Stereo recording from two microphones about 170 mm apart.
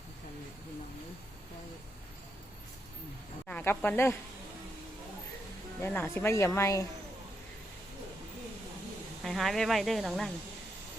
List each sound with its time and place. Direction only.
3.4 s speech: 10° left (ahead or behind)
5.8 s speech: 10° left (ahead or behind)
9.2 s speech: centre (ahead or behind)